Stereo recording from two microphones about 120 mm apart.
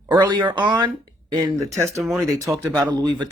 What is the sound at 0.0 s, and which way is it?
Speech, 35° right (ahead or behind).